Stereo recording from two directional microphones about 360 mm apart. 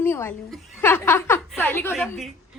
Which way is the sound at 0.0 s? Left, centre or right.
Centre.